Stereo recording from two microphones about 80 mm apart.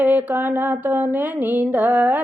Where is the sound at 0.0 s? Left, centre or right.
Right.